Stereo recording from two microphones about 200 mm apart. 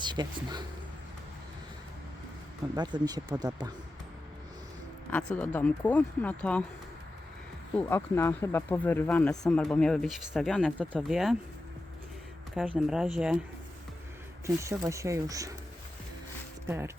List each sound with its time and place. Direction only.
0.0 s speech: 20° right (ahead or behind)
2.7 s speech: 20° right (ahead or behind)
5.1 s speech: 10° left (ahead or behind)
7.8 s speech: 10° left (ahead or behind)
12.5 s speech: 5° right (ahead or behind)
14.4 s speech: 15° right (ahead or behind)
16.6 s speech: 10° right (ahead or behind)